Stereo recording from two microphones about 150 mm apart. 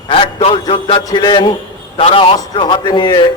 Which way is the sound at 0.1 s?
35° left (ahead or behind).